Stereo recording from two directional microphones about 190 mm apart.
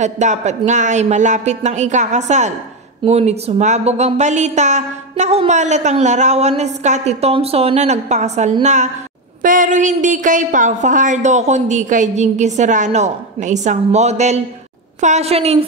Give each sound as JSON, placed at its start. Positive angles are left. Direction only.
{"t": 0.0, "sound": "a woman's voice", "side_deg": -40}